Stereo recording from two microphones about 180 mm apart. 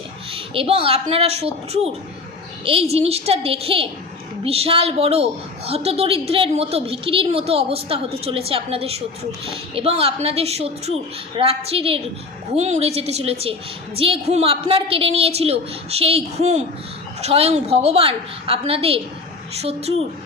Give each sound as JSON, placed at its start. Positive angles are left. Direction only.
{"t": 0.3, "sound": "a woman's voice", "side_deg": -30}